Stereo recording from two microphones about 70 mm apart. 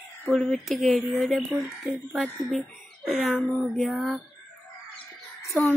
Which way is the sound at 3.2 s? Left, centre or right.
Centre.